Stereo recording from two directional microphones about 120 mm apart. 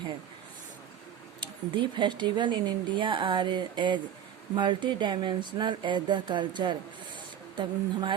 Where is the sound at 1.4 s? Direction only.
40° right (ahead or behind).